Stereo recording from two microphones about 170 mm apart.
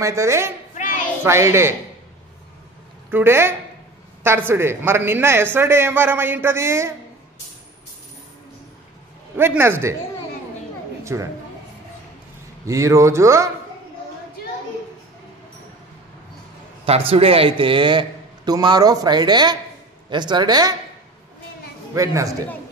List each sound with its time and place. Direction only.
0.0 s speech: 15° right (ahead or behind)
3.1 s speech: 15° right (ahead or behind)
9.4 s speech: 15° right (ahead or behind)
11.1 s speech: 15° right (ahead or behind)
12.6 s speech: 20° right (ahead or behind)
16.8 s a man's voice: 35° right (ahead or behind)
21.9 s a man's voice: 20° right (ahead or behind)